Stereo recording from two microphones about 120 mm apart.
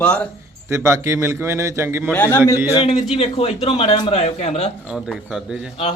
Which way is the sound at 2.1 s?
15° left (ahead or behind).